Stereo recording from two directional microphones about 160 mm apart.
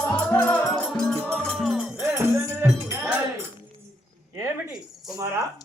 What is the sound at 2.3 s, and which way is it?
Music, 15° right (ahead or behind).